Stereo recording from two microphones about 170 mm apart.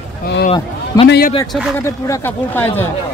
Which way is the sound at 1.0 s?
70° left (ahead or behind).